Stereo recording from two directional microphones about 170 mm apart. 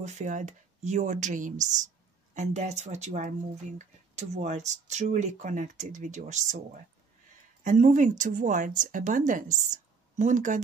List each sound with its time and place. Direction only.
0.0 s speech: 45° right (ahead or behind)